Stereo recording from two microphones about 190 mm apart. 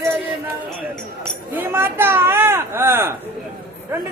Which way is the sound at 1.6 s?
10° right (ahead or behind).